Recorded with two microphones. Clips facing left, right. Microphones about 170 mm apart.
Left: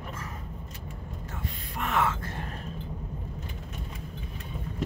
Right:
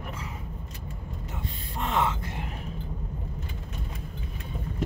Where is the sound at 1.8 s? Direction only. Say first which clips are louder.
Right 1 dB; 25° right (ahead or behind).